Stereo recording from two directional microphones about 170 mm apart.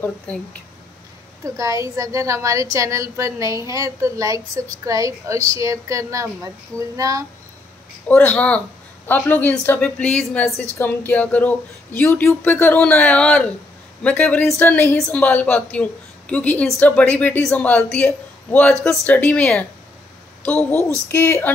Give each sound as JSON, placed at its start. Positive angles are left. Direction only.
{"t": 0.0, "sound": "speech", "side_deg": 10}
{"t": 1.4, "sound": "a woman's voice", "side_deg": -20}
{"t": 8.1, "sound": "speech", "side_deg": 10}
{"t": 21.1, "sound": "speech", "side_deg": 15}